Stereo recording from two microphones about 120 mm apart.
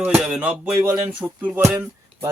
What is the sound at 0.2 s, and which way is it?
Speech, 10° right (ahead or behind).